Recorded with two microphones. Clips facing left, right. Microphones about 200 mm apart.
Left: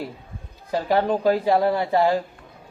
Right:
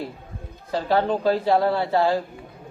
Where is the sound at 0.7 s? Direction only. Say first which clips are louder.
Left 1 dB; 15° left (ahead or behind).